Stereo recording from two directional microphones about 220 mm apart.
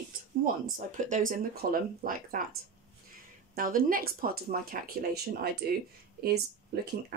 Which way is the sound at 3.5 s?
40° right (ahead or behind).